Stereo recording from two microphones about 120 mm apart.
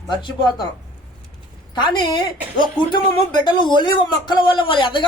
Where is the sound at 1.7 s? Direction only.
40° left (ahead or behind).